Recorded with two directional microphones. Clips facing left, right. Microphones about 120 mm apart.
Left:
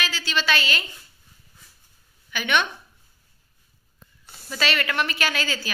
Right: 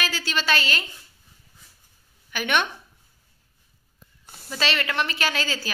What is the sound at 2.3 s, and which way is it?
Speech, 45° right (ahead or behind).